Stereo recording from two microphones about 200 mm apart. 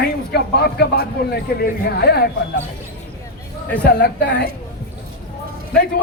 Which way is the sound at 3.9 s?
55° left (ahead or behind).